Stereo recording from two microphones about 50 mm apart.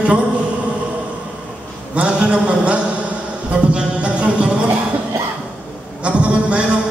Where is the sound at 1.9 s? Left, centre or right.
Right.